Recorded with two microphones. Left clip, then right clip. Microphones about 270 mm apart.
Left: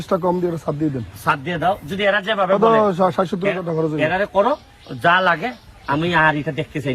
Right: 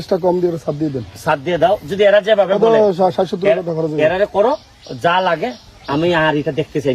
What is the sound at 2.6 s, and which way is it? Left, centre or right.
Speech, left.